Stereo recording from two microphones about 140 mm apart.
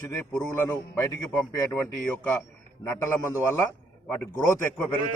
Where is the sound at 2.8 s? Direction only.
20° left (ahead or behind).